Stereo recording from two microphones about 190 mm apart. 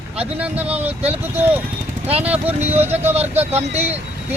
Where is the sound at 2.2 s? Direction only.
5° right (ahead or behind).